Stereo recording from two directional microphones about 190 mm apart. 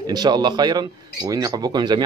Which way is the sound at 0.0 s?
20° right (ahead or behind).